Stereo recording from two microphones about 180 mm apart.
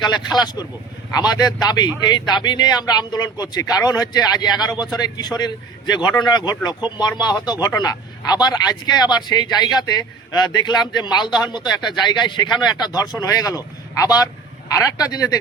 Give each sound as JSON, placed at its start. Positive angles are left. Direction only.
{"t": 0.3, "sound": "a man's voice", "side_deg": 20}